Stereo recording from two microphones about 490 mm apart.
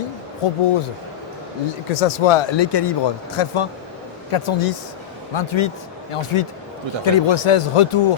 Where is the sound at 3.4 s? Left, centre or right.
Left.